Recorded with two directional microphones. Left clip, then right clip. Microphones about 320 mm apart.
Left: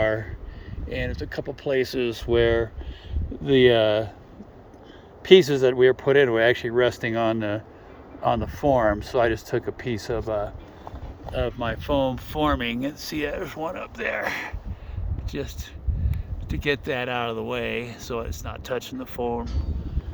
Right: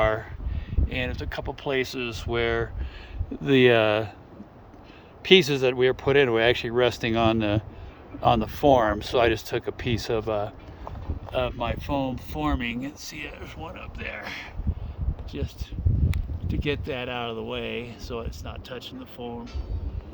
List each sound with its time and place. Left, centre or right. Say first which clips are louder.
0.0 s a sound: even; centre
0.9 s speech: left 1 dB; centre
5.3 s speech: left 3 dB; centre
11.3 s speech: even; centre